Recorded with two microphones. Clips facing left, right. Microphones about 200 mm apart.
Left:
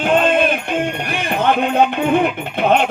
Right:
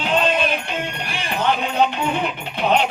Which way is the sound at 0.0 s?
50° left (ahead or behind).